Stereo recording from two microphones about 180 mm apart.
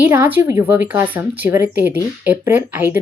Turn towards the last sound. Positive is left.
turn(degrees=-10)  # may be behind; listen again after turning